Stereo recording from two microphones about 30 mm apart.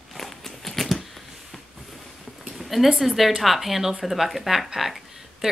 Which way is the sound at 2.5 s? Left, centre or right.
Centre.